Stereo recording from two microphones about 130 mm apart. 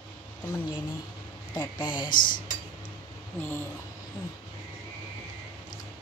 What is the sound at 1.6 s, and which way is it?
Speech, 35° left (ahead or behind).